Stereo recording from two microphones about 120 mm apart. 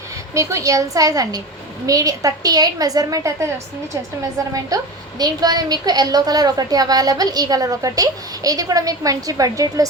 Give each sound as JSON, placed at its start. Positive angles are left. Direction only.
{"t": 0.3, "sound": "a woman's voice", "side_deg": -25}
{"t": 4.5, "sound": "a woman's voice", "side_deg": -30}